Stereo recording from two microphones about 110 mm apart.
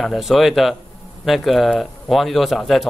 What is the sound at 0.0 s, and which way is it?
Speech, centre (ahead or behind).